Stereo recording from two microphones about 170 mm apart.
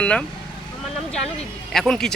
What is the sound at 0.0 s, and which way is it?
Speech, 5° left (ahead or behind).